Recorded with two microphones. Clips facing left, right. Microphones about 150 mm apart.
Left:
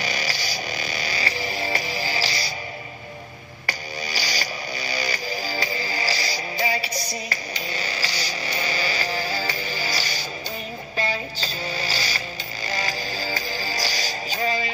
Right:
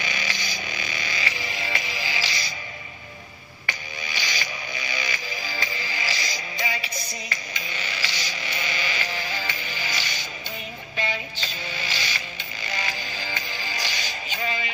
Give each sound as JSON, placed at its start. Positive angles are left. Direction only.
{"t": 0.0, "sound": "vehicle", "side_deg": 35}
{"t": 3.6, "sound": "a sound", "side_deg": 40}
{"t": 11.0, "sound": "music", "side_deg": 40}